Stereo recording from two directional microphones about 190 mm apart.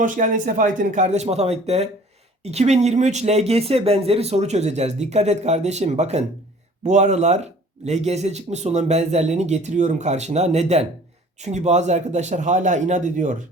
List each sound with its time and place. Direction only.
0.0 s speech: 40° right (ahead or behind)